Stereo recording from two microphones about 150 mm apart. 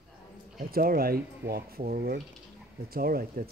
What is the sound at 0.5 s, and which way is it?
Speech, 80° right.